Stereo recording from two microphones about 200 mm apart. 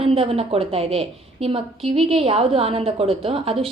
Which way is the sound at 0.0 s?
30° right (ahead or behind).